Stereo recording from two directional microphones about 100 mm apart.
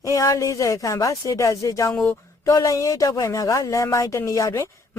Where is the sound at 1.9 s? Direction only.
10° left (ahead or behind).